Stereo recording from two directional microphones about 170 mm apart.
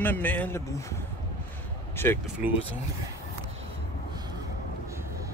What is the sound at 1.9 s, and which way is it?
Speech, 15° left (ahead or behind).